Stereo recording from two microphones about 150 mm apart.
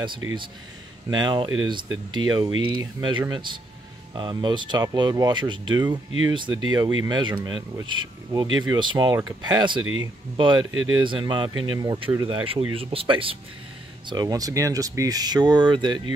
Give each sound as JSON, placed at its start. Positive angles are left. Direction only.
{"t": 0.0, "sound": "speech", "side_deg": -30}